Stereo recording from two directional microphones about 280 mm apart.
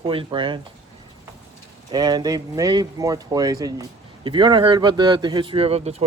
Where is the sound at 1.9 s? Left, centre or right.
Centre.